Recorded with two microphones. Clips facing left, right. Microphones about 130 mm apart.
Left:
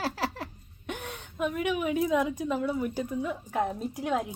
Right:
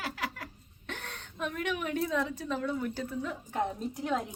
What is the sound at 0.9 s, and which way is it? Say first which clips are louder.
A woman's voice: left 5 dB; 10° left (ahead or behind).